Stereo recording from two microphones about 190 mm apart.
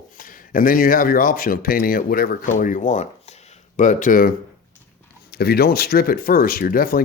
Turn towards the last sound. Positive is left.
turn(degrees=50)  # may be behind; listen again after turning